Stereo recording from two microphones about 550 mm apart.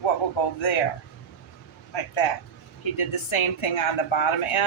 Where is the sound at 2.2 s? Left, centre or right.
Left.